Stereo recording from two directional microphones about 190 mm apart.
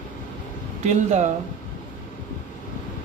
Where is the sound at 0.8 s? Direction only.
40° right (ahead or behind).